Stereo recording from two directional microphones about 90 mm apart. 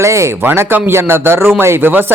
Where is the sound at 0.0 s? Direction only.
30° right (ahead or behind).